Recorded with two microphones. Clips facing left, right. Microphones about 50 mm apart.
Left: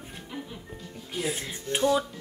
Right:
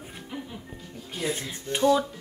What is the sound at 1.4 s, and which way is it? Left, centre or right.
Speech, centre.